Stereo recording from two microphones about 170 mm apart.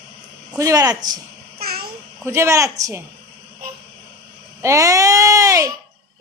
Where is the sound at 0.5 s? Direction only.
20° right (ahead or behind).